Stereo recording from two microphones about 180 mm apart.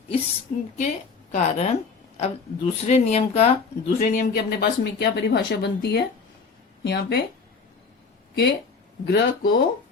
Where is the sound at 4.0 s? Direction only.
50° left (ahead or behind); by 7.2 s 65° left (ahead or behind).